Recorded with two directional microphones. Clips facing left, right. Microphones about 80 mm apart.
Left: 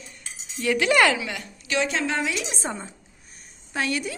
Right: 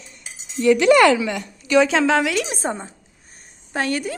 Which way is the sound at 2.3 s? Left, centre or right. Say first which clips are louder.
Right 6 dB; right.